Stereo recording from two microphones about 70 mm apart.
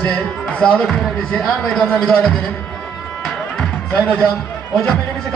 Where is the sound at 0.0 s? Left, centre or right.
Centre.